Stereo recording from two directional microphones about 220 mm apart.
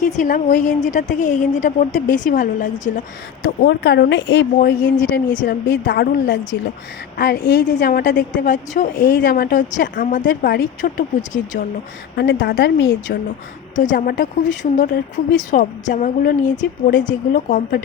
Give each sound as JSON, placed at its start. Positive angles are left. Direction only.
{"t": 0.0, "sound": "a woman's voice", "side_deg": 35}
{"t": 3.4, "sound": "a woman's voice", "side_deg": 45}
{"t": 4.5, "sound": "a woman's voice", "side_deg": 40}
{"t": 8.4, "sound": "a woman's voice", "side_deg": 35}
{"t": 12.1, "sound": "a woman's voice", "side_deg": 45}
{"t": 13.7, "sound": "a woman's voice", "side_deg": 35}